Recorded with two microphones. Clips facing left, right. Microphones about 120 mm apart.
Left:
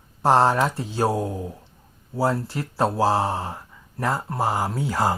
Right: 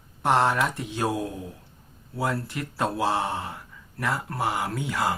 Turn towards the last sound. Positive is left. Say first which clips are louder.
# left 4 dB
turn(degrees=35)  # may be behind; listen again after turning